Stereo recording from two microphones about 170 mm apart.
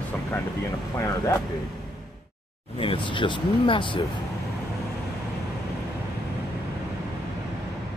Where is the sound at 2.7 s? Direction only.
30° left (ahead or behind).